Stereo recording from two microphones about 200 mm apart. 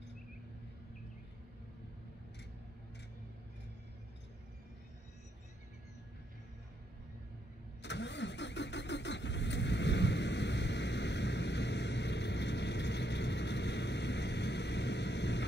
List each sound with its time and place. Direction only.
7.8 s vehicle: 60° left (ahead or behind)